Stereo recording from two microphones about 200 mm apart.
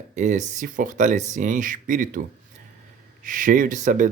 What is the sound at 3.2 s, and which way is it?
Speech, 40° right (ahead or behind).